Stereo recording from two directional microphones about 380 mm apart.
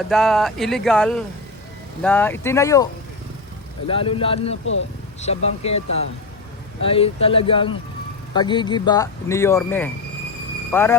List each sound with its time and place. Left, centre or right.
0.1 s speech: centre
4.6 s speech: left
5.2 s speech: centre
6.8 s speech: centre